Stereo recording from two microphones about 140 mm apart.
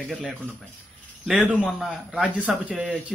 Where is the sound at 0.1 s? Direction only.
Centre (ahead or behind).